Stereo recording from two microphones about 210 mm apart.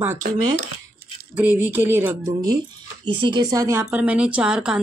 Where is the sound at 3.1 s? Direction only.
20° right (ahead or behind); by 4.7 s 5° right (ahead or behind).